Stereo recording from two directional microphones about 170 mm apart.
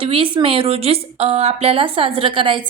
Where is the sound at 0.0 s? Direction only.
30° right (ahead or behind).